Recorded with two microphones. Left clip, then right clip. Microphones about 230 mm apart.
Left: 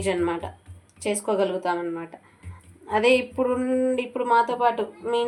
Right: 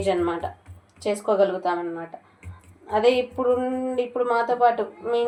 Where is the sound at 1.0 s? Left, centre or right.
Left.